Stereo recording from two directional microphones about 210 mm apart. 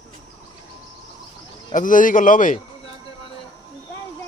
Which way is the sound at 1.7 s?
40° left (ahead or behind).